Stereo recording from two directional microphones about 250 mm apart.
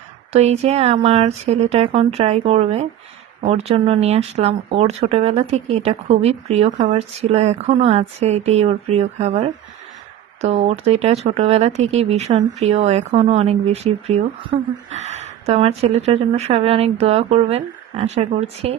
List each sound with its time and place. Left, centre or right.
0.3 s speech: right